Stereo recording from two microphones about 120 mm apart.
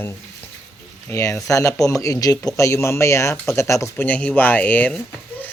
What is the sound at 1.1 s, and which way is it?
Speech, 25° left (ahead or behind).